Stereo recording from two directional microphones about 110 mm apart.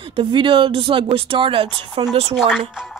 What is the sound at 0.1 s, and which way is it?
Speech, 50° right (ahead or behind).